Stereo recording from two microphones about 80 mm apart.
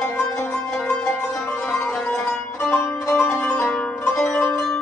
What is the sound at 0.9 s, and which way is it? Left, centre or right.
Music, centre.